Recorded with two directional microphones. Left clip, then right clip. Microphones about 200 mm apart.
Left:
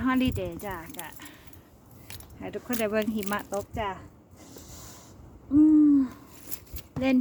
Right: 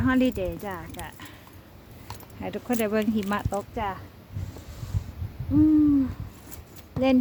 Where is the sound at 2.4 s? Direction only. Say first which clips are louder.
Right 5 dB; 15° right (ahead or behind).